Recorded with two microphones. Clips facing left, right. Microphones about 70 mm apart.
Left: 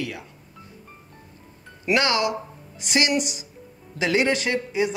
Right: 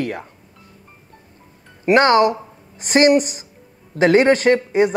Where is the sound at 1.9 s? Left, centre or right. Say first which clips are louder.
Right 9 dB; right.